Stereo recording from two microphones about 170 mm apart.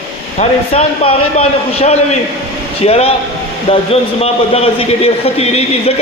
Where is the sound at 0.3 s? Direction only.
40° left (ahead or behind).